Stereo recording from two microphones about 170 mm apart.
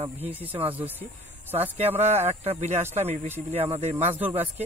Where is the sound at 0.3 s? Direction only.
10° right (ahead or behind).